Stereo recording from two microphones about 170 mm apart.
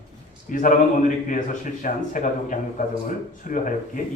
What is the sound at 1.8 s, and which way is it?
A man's voice, 50° left (ahead or behind).